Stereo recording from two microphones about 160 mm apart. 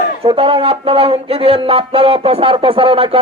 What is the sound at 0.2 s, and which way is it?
A man's voice, 35° right (ahead or behind).